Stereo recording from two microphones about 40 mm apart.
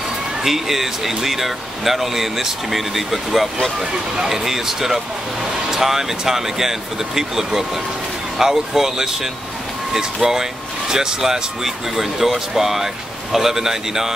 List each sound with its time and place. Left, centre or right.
0.4 s speech: centre